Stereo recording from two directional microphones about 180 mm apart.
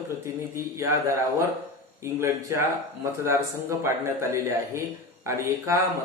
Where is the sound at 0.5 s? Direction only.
15° right (ahead or behind).